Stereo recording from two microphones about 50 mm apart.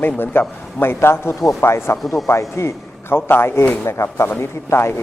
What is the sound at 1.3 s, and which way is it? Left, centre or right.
Speech, left.